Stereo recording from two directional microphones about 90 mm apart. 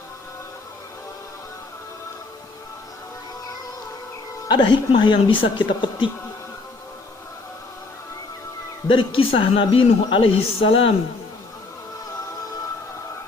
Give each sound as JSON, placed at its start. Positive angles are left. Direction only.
{"t": 4.4, "sound": "speech", "side_deg": 55}
{"t": 8.9, "sound": "speech", "side_deg": 80}